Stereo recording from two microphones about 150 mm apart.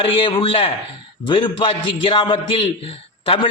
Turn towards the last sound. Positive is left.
turn(degrees=35)  # may be behind; listen again after turning